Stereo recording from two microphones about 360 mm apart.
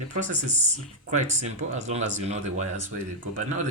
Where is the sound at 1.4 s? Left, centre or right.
Centre.